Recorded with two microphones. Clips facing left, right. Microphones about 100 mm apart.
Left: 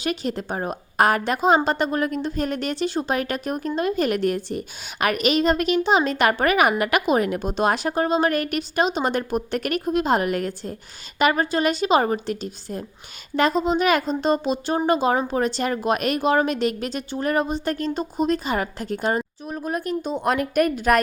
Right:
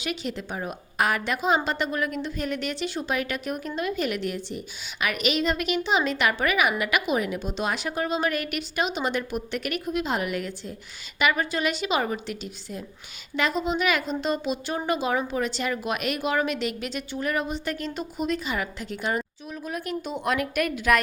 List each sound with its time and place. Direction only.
0.0 s a woman's voice: 40° left (ahead or behind)